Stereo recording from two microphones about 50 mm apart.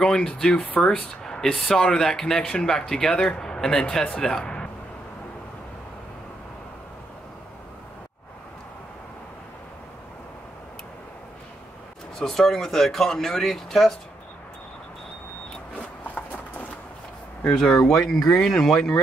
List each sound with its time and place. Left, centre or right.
0.0 s speech: centre
12.2 s speech: centre
17.8 s speech: centre